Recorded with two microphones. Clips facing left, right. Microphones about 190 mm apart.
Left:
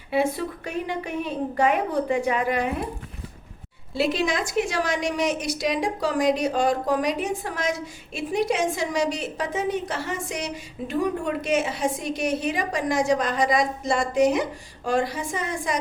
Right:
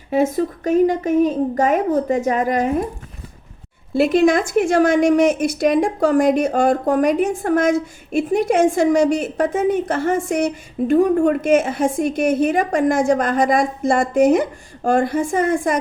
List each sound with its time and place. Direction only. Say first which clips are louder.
0.1 s a woman's voice: right 6 dB; 45° right (ahead or behind)
3.9 s a woman's voice: right 9 dB; 50° right (ahead or behind)